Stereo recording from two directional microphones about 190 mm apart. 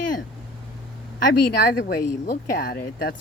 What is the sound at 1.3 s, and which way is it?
Speech, 60° left (ahead or behind).